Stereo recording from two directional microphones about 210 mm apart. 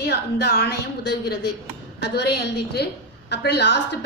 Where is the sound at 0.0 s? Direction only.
50° left (ahead or behind).